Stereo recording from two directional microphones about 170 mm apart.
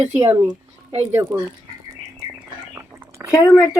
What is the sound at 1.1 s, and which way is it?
Speech, 15° right (ahead or behind).